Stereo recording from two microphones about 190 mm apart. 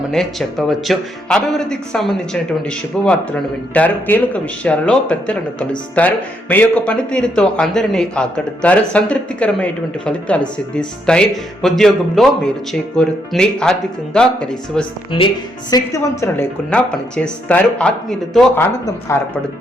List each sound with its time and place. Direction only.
0.1 s speech: centre (ahead or behind)
15.1 s speech: 25° left (ahead or behind)
15.7 s speech: 15° left (ahead or behind)
19.1 s speech: 15° left (ahead or behind)